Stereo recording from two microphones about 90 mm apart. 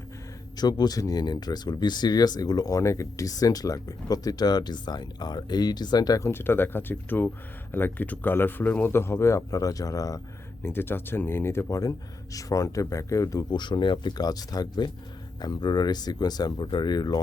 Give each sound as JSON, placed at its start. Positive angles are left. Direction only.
{"t": 0.5, "sound": "speech", "side_deg": 50}
{"t": 6.2, "sound": "a man's voice", "side_deg": 25}
{"t": 10.6, "sound": "a man's voice", "side_deg": 25}
{"t": 11.8, "sound": "speech", "side_deg": 40}
{"t": 13.5, "sound": "speech", "side_deg": 60}